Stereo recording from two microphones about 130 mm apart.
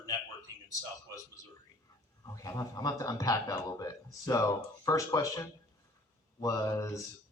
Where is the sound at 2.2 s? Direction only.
25° left (ahead or behind).